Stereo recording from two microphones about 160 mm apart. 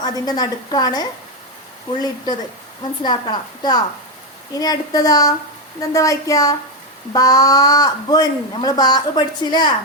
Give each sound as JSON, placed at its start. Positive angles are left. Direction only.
{"t": 0.0, "sound": "a woman's voice", "side_deg": 25}
{"t": 3.0, "sound": "a woman's voice", "side_deg": 25}